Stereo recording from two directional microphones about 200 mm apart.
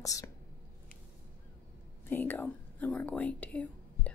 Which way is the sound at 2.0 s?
10° left (ahead or behind).